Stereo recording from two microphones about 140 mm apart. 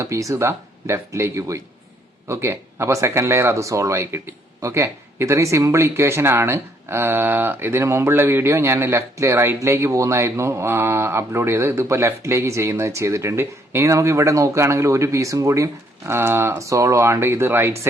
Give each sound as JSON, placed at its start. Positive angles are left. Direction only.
{"t": 0.0, "sound": "speech", "side_deg": -20}